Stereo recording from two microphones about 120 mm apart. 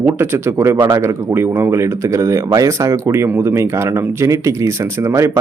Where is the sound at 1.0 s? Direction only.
20° right (ahead or behind).